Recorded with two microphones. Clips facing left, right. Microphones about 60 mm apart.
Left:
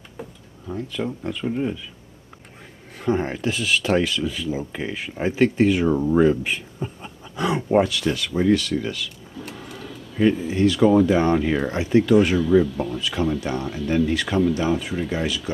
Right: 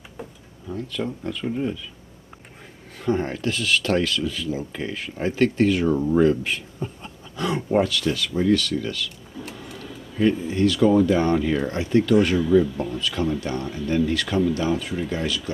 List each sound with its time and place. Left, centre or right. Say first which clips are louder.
0.7 s speech: left 1 dB; centre
3.0 s speech: left 1 dB; centre
9.4 s printer: left 1 dB; centre
10.1 s speech: left 1 dB; centre
12.6 s speech: left 1 dB; centre
13.0 s speech: left 1 dB; centre